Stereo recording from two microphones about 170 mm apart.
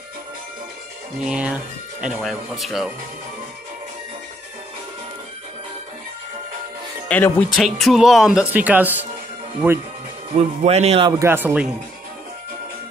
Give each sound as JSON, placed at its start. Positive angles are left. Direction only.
{"t": 1.2, "sound": "speech", "side_deg": -5}
{"t": 7.1, "sound": "speech", "side_deg": 10}
{"t": 7.5, "sound": "speech", "side_deg": 0}
{"t": 10.3, "sound": "speech", "side_deg": -40}
{"t": 11.1, "sound": "speech", "side_deg": -15}